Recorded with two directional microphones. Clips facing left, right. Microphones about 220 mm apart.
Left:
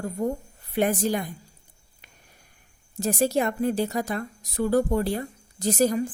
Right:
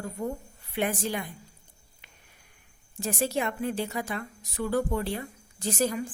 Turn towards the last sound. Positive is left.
turn(degrees=40)  # may be behind; listen again after turning